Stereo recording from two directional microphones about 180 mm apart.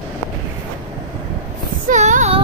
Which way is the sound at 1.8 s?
45° right (ahead or behind).